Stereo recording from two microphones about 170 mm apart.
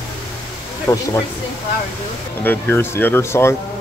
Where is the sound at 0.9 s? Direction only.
20° left (ahead or behind).